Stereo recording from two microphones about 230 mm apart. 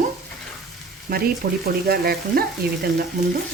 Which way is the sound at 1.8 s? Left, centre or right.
Right.